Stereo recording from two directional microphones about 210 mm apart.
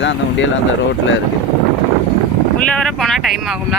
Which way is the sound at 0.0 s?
60° left (ahead or behind).